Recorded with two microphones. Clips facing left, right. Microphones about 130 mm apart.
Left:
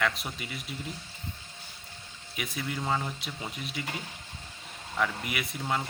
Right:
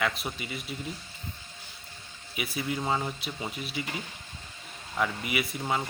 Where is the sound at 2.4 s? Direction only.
5° right (ahead or behind).